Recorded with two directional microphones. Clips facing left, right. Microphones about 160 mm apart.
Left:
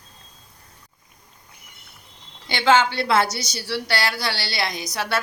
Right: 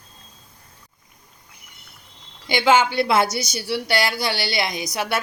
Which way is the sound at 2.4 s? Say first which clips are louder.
Right 1 dB; 15° right (ahead or behind).